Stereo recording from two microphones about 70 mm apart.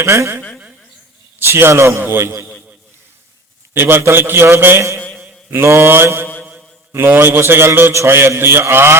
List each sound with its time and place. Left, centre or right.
0.0 s a man's voice: right
3.8 s a man's voice: right